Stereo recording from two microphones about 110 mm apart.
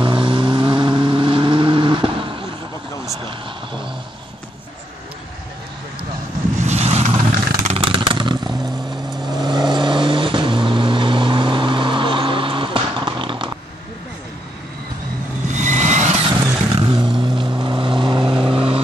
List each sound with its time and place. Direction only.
0.0 s vehicle: 50° right (ahead or behind)
6.6 s vehicle: 80° right
7.9 s vehicle: 45° right (ahead or behind)
15.5 s vehicle: 90° right
16.3 s vehicle: 45° right (ahead or behind)